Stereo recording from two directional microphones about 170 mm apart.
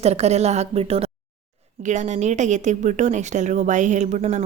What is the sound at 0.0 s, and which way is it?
A woman's voice, 40° right (ahead or behind).